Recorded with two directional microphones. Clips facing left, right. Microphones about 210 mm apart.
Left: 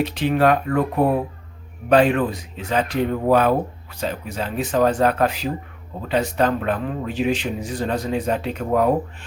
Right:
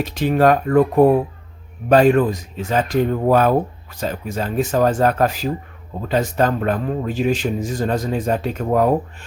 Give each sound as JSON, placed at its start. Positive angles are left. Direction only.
{"t": 0.0, "sound": "speech", "side_deg": -45}